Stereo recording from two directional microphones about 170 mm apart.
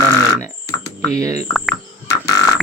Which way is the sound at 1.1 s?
20° right (ahead or behind).